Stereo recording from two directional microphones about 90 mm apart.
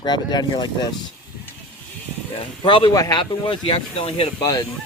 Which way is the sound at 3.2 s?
70° left (ahead or behind).